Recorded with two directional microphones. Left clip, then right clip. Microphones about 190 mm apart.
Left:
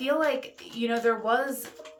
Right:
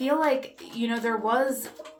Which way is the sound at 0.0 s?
20° left (ahead or behind).